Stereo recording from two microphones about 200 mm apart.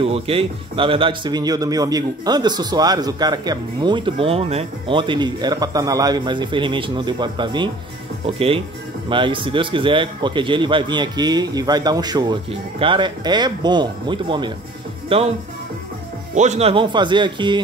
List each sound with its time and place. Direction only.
0.0 s speech: 30° right (ahead or behind)
16.3 s speech: 35° right (ahead or behind)